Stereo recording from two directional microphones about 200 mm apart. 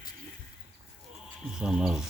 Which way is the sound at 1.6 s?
5° right (ahead or behind).